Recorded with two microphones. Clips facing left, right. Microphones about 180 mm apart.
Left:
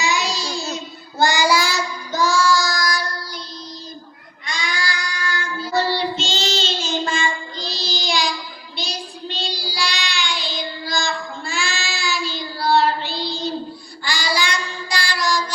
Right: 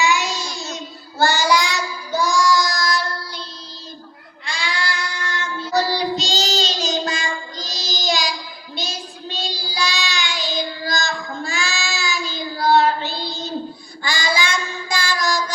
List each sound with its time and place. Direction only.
0.0 s child singing: 35° left (ahead or behind)
1.2 s child singing: 15° left (ahead or behind)
2.1 s child singing: 15° right (ahead or behind)
4.4 s child singing: 30° right (ahead or behind)
5.9 s child singing: 40° right (ahead or behind)